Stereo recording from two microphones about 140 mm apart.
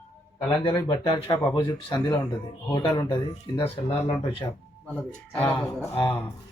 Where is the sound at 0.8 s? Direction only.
35° left (ahead or behind).